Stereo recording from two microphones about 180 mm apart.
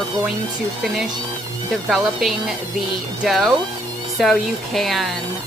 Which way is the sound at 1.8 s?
Centre (ahead or behind).